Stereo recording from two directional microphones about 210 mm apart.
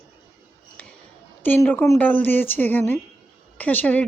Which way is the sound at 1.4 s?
10° left (ahead or behind).